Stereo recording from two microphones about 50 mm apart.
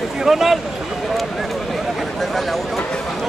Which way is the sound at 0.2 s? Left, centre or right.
Centre.